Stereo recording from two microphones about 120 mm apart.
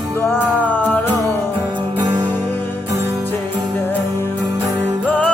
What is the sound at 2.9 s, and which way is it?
Music, 25° right (ahead or behind).